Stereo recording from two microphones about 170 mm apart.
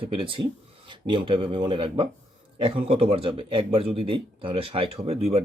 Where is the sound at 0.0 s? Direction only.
30° right (ahead or behind).